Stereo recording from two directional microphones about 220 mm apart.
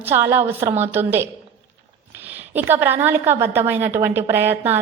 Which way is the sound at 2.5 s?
10° right (ahead or behind).